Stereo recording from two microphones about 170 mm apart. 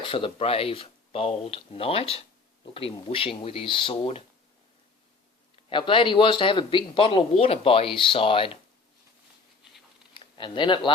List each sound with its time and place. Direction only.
0.0 s speech: 30° left (ahead or behind)
5.6 s speech: 30° left (ahead or behind)
10.2 s speech: 30° left (ahead or behind)